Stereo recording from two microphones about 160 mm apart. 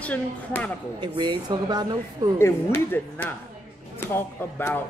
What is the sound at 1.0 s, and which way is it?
Speech, 30° right (ahead or behind).